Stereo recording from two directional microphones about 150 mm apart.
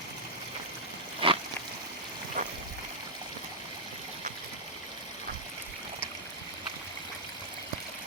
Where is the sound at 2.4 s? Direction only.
65° right (ahead or behind).